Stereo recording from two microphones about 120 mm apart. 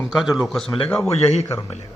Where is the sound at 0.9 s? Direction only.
25° left (ahead or behind).